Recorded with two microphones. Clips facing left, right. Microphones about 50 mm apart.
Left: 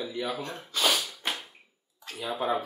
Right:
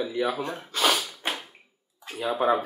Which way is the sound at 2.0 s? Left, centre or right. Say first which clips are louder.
Right 6 dB; centre.